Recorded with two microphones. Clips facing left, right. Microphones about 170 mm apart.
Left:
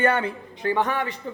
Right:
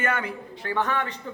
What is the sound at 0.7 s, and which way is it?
Speech, 15° left (ahead or behind).